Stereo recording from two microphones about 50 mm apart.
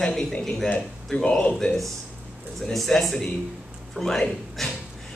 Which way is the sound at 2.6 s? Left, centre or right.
Centre.